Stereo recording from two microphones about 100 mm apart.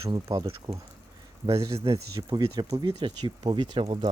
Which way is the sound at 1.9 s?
45° right (ahead or behind).